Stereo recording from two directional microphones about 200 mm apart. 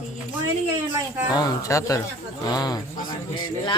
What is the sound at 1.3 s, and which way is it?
A man's voice, 20° left (ahead or behind).